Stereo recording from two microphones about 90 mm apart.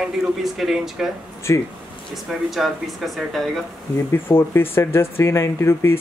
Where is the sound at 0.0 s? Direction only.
5° right (ahead or behind).